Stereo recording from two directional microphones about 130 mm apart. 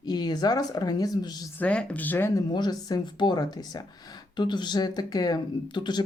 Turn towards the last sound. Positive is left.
turn(degrees=35)  # may be behind; listen again after turning